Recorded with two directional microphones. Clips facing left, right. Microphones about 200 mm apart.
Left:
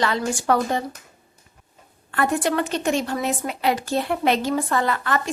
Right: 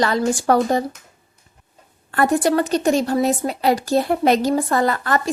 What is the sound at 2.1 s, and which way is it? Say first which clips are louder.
A woman's voice: right 5 dB; 40° right (ahead or behind).